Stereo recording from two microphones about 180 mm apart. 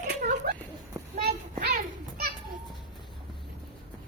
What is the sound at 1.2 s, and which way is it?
Children playing, 60° right (ahead or behind).